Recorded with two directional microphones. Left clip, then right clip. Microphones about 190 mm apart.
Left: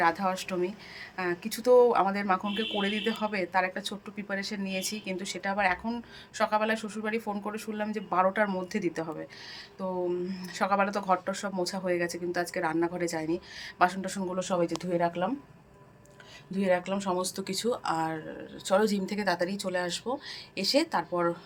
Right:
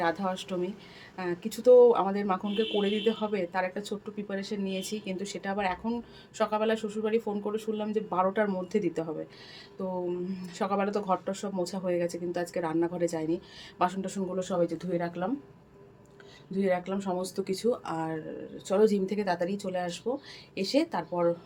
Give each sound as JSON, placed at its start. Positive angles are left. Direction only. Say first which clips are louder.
{"t": 0.0, "sound": "speech", "louder": "left 3 dB", "side_deg": 0}
{"t": 10.2, "sound": "speech", "louder": "left 3 dB", "side_deg": -5}
{"t": 14.3, "sound": "speech", "louder": "even", "side_deg": 10}
{"t": 16.5, "sound": "speech", "louder": "left 1 dB", "side_deg": 15}